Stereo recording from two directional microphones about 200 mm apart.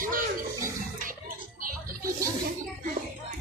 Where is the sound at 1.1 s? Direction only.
45° right (ahead or behind).